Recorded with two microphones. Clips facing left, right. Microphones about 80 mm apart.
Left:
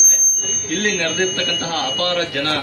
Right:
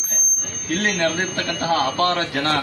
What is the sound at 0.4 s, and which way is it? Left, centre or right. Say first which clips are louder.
Speech: left 1 dB; right.